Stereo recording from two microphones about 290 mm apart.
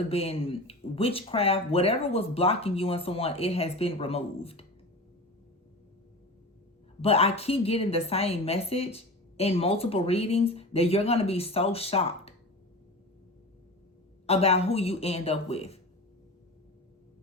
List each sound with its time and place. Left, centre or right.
0.1 s a woman's voice: centre
7.0 s a woman's voice: left
14.3 s a woman's voice: left